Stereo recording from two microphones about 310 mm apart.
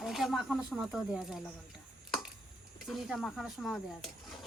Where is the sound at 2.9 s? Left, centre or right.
Centre.